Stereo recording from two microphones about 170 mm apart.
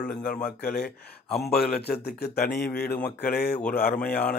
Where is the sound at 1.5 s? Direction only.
65° left (ahead or behind).